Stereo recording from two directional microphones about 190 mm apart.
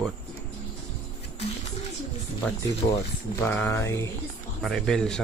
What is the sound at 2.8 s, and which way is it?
Speech, 30° left (ahead or behind).